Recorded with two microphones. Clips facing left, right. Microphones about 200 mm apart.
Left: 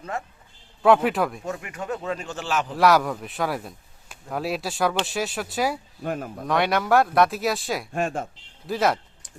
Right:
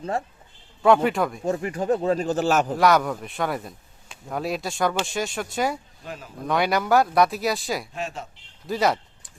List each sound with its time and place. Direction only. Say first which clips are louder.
0.0 s speech: right 5 dB; 30° right (ahead or behind)
0.8 s speech: even; centre (ahead or behind)
1.5 s speech: right 7 dB; 35° right (ahead or behind)
2.7 s speech: even; centre (ahead or behind)
6.0 s speech: left 9 dB; 55° left (ahead or behind)
6.5 s speech: even; centre (ahead or behind)
7.9 s speech: left 6 dB; 50° left (ahead or behind)
8.6 s speech: even; centre (ahead or behind)